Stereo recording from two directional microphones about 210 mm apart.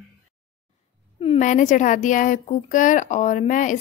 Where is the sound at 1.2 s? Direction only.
30° left (ahead or behind).